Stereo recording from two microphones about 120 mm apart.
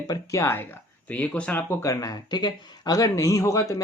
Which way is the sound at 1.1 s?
10° left (ahead or behind).